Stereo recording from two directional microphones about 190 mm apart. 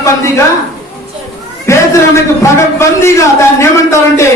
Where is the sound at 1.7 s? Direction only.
15° left (ahead or behind).